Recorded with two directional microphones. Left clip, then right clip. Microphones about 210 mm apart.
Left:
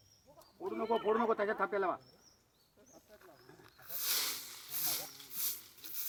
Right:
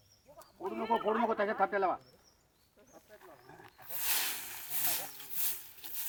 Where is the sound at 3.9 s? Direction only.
40° right (ahead or behind).